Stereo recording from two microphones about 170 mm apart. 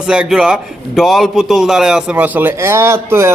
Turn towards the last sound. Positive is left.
turn(degrees=-15)  # may be behind; listen again after turning